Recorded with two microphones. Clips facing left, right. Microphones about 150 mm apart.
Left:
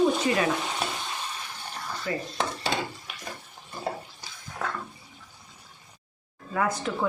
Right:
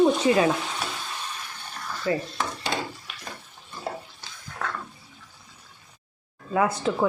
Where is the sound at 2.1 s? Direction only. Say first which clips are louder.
Right 6 dB; 30° right (ahead or behind).